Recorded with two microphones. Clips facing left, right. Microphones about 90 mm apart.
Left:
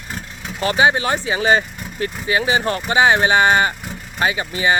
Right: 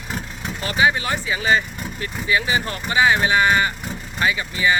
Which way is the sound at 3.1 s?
55° left (ahead or behind).